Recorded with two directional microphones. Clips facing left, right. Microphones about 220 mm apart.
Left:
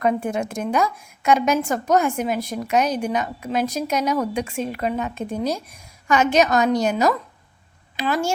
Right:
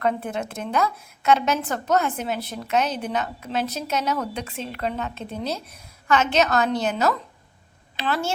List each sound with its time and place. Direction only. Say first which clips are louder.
0.0 s a woman's voice: left 4 dB; 15° left (ahead or behind)